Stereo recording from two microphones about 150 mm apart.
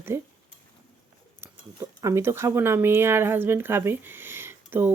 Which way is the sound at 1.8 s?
20° right (ahead or behind).